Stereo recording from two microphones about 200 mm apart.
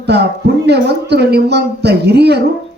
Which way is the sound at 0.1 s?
55° right (ahead or behind).